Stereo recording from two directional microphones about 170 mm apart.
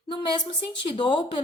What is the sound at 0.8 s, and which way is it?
Speech, 30° left (ahead or behind).